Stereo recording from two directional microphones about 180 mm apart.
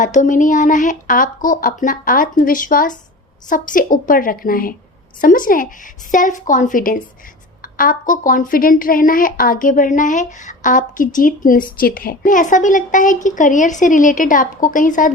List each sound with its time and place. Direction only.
0.0 s a woman's voice: 45° left (ahead or behind)